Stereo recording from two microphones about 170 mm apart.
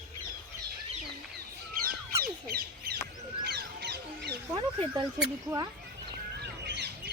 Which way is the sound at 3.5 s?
70° right (ahead or behind).